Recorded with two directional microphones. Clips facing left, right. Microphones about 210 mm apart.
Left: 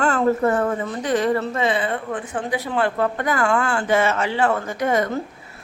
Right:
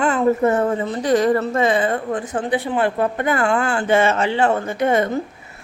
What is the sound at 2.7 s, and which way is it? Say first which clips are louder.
A woman's voice: left 1 dB; 15° right (ahead or behind).